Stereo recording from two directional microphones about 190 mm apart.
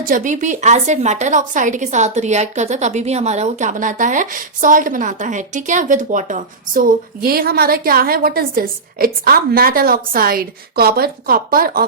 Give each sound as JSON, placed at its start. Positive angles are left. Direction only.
{"t": 0.0, "sound": "a woman's voice", "side_deg": -45}